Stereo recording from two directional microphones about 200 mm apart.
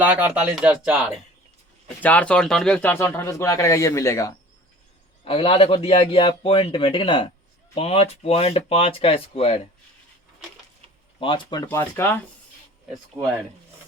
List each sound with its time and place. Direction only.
0.0 s speech: 5° right (ahead or behind)
2.0 s speech: 5° left (ahead or behind)
5.2 s a man's voice: 25° left (ahead or behind)
11.2 s a man's voice: 25° left (ahead or behind)
13.2 s speech: centre (ahead or behind)